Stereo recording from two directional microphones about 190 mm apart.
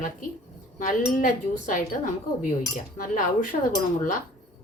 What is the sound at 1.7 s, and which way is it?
A woman's voice, 45° left (ahead or behind).